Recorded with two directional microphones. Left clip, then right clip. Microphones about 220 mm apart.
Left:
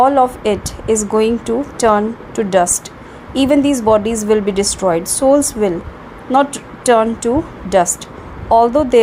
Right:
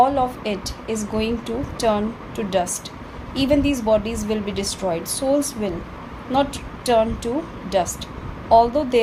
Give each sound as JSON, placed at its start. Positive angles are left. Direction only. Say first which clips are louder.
{"t": 0.0, "sound": "a woman's voice", "louder": "left 7 dB", "side_deg": 30}
{"t": 8.4, "sound": "a woman's voice", "louder": "left 4 dB", "side_deg": 30}